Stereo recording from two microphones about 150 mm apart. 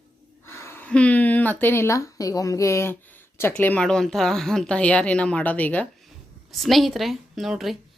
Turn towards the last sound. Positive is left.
turn(degrees=0)  # may be behind; listen again after turning